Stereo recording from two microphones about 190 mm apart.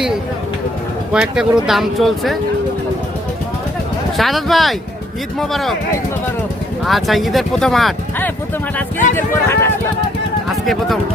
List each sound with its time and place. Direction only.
1.1 s speech: 5° right (ahead or behind)
4.2 s speech: centre (ahead or behind)
6.8 s speech: centre (ahead or behind)
9.1 s speech: 10° left (ahead or behind)
10.5 s speech: centre (ahead or behind)